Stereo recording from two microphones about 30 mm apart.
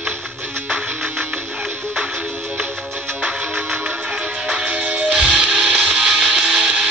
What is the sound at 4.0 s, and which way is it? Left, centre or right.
Music, right.